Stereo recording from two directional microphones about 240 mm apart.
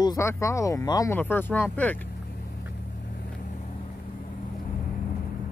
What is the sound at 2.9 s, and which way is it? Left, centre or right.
Vehicle, left.